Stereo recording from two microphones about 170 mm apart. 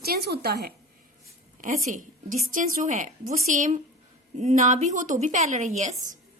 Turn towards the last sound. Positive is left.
turn(degrees=-45)  # may be behind; listen again after turning